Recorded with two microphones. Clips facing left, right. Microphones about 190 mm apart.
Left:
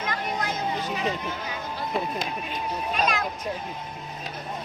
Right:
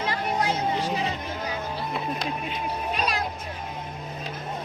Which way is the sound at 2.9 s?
35° right (ahead or behind).